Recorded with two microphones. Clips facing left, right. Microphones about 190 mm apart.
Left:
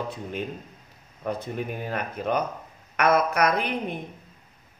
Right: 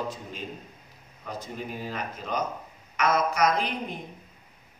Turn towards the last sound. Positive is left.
turn(degrees=60)  # may be behind; listen again after turning